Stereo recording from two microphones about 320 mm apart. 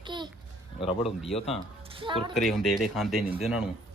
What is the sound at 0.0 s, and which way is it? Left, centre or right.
Babbling, centre.